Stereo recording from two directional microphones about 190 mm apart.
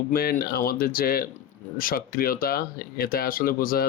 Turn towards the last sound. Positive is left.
turn(degrees=50)  # may be behind; listen again after turning